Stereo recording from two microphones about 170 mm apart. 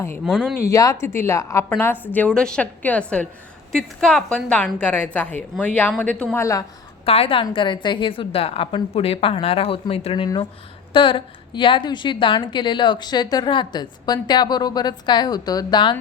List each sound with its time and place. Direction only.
0.3 s speech: 5° right (ahead or behind)
0.7 s a woman's voice: 20° left (ahead or behind)
6.4 s a woman's voice: 20° left (ahead or behind)
7.0 s a woman's voice: 35° left (ahead or behind)